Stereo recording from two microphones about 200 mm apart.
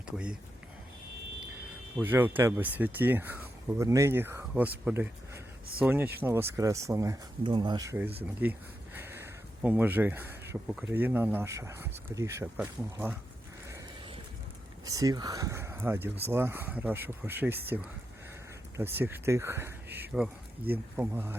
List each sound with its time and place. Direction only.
0.0 s speech: 5° right (ahead or behind)
2.0 s speech: 10° right (ahead or behind)
14.8 s speech: 20° right (ahead or behind)
18.8 s speech: 10° right (ahead or behind)